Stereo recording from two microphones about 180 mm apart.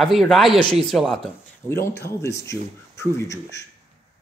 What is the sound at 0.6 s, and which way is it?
Speech, 25° left (ahead or behind).